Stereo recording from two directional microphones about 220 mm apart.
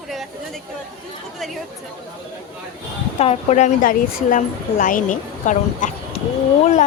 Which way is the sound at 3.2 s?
30° left (ahead or behind).